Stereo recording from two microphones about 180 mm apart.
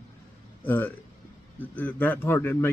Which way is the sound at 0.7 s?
10° left (ahead or behind).